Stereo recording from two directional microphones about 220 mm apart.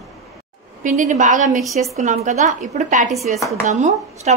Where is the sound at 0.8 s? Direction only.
35° right (ahead or behind).